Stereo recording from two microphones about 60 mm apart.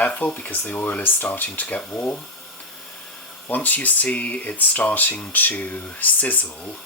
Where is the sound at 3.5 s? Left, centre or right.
Left.